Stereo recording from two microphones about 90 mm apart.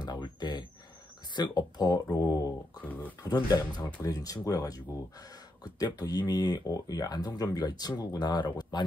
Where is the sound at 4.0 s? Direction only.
40° left (ahead or behind).